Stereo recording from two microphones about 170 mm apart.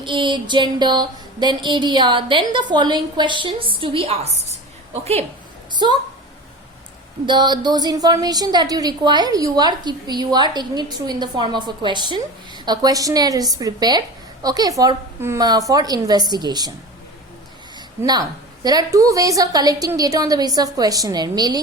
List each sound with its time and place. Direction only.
0.0 s a woman's voice: 30° right (ahead or behind)
5.8 s a woman's voice: 25° right (ahead or behind)
7.3 s a woman's voice: 25° right (ahead or behind)
17.7 s a sound: 25° right (ahead or behind)
18.6 s a woman's voice: 25° right (ahead or behind)